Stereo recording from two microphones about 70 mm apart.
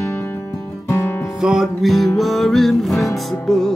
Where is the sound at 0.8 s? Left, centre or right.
Left.